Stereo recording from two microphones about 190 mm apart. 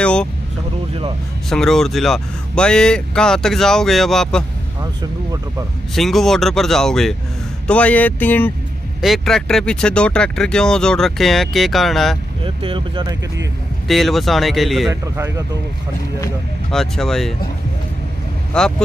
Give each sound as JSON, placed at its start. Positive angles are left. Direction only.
{"t": 0.0, "sound": "vehicle", "side_deg": 5}
{"t": 1.5, "sound": "speech", "side_deg": 0}
{"t": 5.9, "sound": "speech", "side_deg": 0}
{"t": 12.4, "sound": "speech", "side_deg": -25}
{"t": 13.8, "sound": "speech", "side_deg": 0}
{"t": 15.1, "sound": "speech", "side_deg": -15}
{"t": 16.7, "sound": "speech", "side_deg": 0}
{"t": 18.5, "sound": "speech", "side_deg": 5}